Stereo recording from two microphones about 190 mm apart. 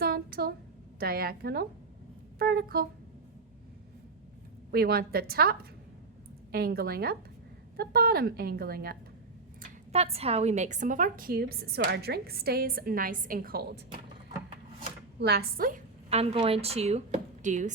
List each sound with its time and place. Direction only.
0.0 s a sound: 55° right (ahead or behind)
0.9 s a woman's voice: 50° right (ahead or behind)
4.7 s a woman's voice: 55° right (ahead or behind)
9.6 s a woman's voice: 40° right (ahead or behind); by 13.7 s 55° right (ahead or behind)
15.2 s a woman's voice: 55° right (ahead or behind)
16.0 s a woman's voice: 35° right (ahead or behind)